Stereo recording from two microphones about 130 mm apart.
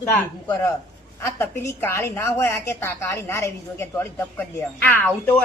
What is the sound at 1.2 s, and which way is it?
A woman's voice, 20° left (ahead or behind).